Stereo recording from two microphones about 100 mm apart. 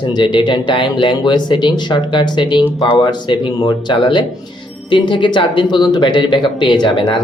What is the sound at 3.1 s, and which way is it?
Speech, 50° left (ahead or behind).